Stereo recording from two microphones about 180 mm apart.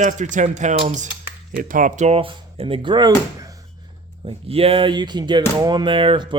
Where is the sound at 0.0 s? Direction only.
45° right (ahead or behind); by 3.1 s 25° right (ahead or behind).